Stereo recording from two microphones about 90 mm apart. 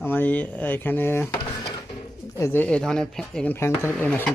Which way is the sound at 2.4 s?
25° left (ahead or behind).